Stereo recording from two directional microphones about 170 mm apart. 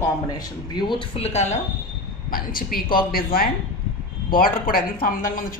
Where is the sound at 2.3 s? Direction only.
60° left (ahead or behind).